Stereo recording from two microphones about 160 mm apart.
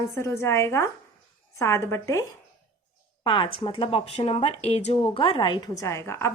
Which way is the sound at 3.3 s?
35° left (ahead or behind).